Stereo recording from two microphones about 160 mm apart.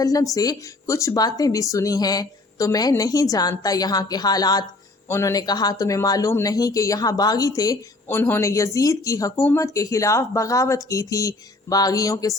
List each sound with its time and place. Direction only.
0.0 s speech: 20° left (ahead or behind)